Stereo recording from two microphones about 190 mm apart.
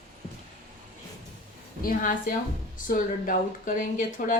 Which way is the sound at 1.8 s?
45° left (ahead or behind).